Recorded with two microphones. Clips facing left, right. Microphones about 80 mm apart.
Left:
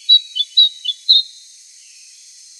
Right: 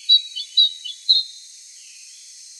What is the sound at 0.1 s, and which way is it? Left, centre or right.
Bird, centre.